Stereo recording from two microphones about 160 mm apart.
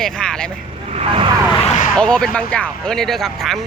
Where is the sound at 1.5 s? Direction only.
45° left (ahead or behind).